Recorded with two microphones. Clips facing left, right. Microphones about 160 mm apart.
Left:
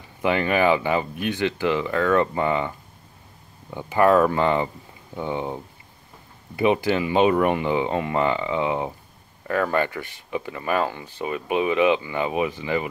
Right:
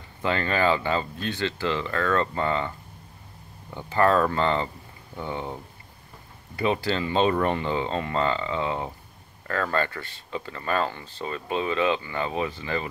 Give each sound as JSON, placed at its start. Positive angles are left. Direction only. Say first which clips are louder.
{"t": 0.2, "sound": "speech", "louder": "left 4 dB", "side_deg": 15}
{"t": 3.7, "sound": "speech", "louder": "left 4 dB", "side_deg": 15}